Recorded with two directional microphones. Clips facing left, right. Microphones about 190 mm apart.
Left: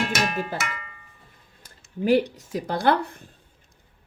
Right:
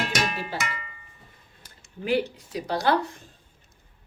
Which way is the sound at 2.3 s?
45° left (ahead or behind).